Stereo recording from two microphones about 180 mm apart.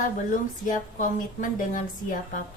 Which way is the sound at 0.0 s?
45° left (ahead or behind).